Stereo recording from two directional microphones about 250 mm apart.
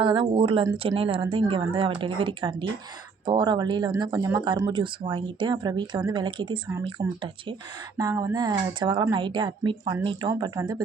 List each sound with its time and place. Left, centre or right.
0.0 s a woman's voice: centre